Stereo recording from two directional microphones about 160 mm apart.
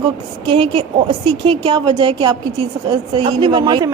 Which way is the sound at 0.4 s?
35° right (ahead or behind).